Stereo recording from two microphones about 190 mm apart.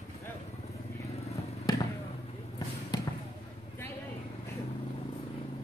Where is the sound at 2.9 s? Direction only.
20° left (ahead or behind).